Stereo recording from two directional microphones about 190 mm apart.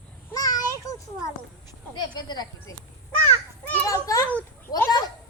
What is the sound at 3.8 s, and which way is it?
Children playing, 15° left (ahead or behind).